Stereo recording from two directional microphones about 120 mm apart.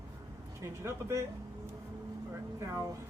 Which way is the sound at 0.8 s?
25° right (ahead or behind).